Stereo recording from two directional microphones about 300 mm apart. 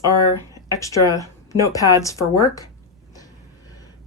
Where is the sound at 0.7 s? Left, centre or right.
Centre.